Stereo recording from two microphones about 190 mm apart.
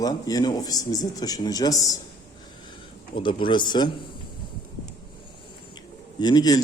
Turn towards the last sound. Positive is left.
turn(degrees=20)  # may be behind; listen again after turning